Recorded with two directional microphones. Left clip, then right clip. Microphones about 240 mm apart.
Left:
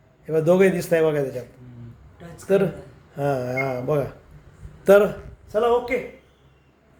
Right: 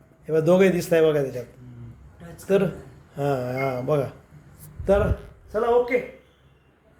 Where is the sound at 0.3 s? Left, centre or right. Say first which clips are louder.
Left 1 dB; centre.